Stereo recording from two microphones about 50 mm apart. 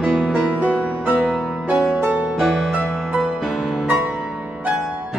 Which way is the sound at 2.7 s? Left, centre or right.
Right.